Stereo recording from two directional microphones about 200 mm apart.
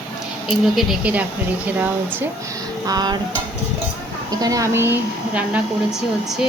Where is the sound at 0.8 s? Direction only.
5° right (ahead or behind).